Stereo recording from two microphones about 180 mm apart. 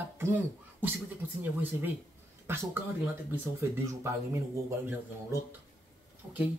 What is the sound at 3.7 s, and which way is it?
Speech, 15° right (ahead or behind).